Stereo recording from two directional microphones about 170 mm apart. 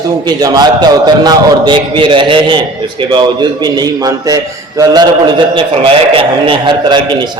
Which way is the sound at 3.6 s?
25° right (ahead or behind).